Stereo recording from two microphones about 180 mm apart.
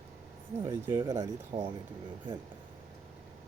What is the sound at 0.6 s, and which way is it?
Speech, 15° right (ahead or behind).